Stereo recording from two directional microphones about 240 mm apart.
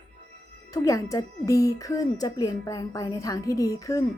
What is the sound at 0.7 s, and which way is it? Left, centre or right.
A woman's voice, centre.